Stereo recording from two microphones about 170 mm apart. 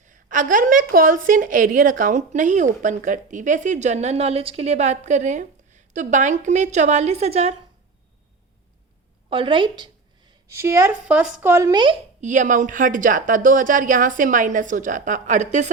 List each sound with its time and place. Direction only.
0.1 s a woman's voice: 50° right (ahead or behind)
9.3 s a woman's voice: 30° right (ahead or behind)
10.5 s a woman's voice: 15° right (ahead or behind)
12.2 s a woman's voice: 45° right (ahead or behind)